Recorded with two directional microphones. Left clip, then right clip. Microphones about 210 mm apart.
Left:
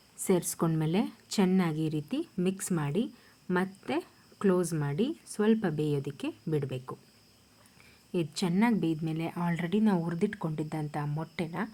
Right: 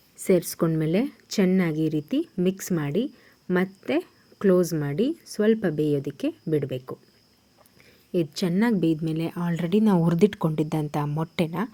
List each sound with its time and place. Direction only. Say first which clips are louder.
0.2 s a woman's voice: right 7 dB; 5° right (ahead or behind)
8.1 s a woman's voice: right 6 dB; 10° right (ahead or behind)